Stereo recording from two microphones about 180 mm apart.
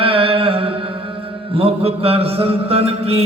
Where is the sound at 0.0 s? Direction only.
30° right (ahead or behind).